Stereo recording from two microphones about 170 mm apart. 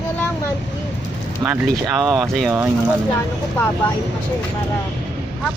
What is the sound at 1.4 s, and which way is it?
Speech, 5° right (ahead or behind).